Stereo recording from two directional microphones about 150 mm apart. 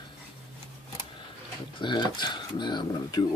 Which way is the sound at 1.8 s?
30° left (ahead or behind).